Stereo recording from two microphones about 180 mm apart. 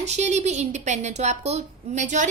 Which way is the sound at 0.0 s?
40° right (ahead or behind).